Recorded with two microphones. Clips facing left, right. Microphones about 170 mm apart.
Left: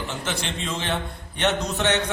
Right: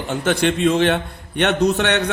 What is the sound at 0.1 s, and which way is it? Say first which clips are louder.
A man's voice: right 11 dB; 60° right (ahead or behind).